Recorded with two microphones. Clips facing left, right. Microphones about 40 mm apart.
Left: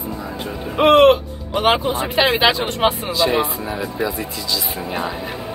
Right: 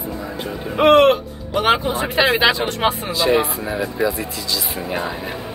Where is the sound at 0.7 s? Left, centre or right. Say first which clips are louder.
Left 1 dB; centre.